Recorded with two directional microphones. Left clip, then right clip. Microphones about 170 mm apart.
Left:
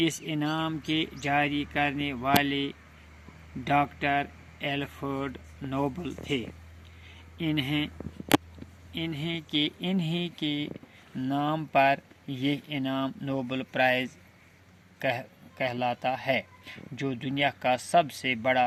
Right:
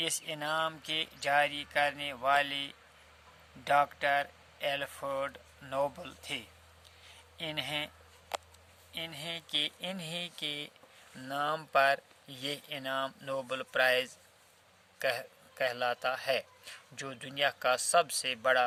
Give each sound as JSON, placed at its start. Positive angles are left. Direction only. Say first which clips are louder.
{"t": 0.0, "sound": "a man's voice", "louder": "left 6 dB", "side_deg": -10}
{"t": 9.0, "sound": "a man's voice", "louder": "left 5 dB", "side_deg": -10}